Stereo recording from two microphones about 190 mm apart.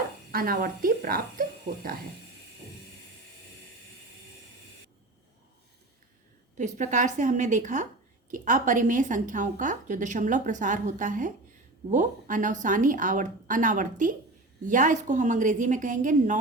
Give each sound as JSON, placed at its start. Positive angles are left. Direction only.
{"t": 0.3, "sound": "a woman's voice", "side_deg": -50}
{"t": 6.6, "sound": "a woman's voice", "side_deg": -40}